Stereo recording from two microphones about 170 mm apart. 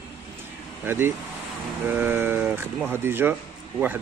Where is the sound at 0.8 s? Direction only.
15° right (ahead or behind).